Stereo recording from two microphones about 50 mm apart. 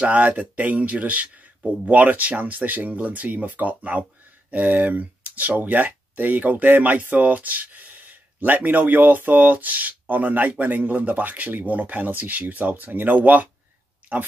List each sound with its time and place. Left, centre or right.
0.0 s speech: right